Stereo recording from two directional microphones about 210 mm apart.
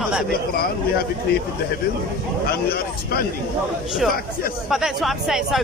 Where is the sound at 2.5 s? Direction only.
45° left (ahead or behind).